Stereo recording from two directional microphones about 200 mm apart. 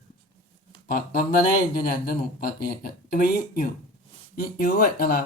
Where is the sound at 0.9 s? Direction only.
45° left (ahead or behind).